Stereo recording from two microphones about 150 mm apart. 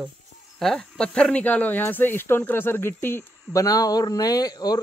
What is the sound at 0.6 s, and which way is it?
Speech, 5° left (ahead or behind).